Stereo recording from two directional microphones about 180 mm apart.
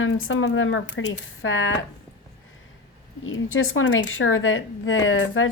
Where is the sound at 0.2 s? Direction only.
90° left.